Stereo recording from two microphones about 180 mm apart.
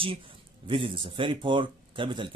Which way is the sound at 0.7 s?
30° right (ahead or behind).